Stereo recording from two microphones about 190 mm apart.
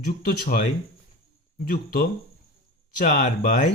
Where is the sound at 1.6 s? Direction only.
50° left (ahead or behind).